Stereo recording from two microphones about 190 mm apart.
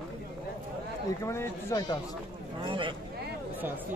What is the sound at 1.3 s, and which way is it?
Speech, 15° left (ahead or behind).